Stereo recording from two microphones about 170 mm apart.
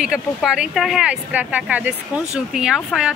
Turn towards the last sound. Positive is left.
turn(degrees=-5)  # may be behind; listen again after turning